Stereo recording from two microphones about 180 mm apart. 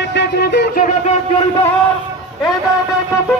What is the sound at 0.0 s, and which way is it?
Music, 70° left (ahead or behind).